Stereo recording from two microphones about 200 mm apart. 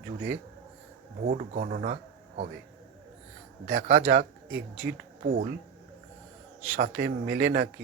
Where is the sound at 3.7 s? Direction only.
40° right (ahead or behind).